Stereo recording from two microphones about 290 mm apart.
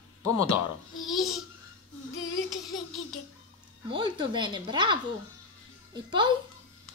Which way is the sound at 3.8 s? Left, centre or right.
Centre.